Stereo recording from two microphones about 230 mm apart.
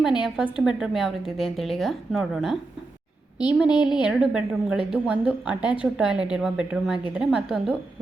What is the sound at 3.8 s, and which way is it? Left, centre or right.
A woman's voice, centre.